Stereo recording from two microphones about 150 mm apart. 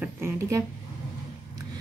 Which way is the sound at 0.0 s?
15° right (ahead or behind).